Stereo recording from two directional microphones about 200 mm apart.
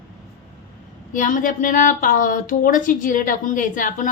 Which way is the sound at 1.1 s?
40° left (ahead or behind).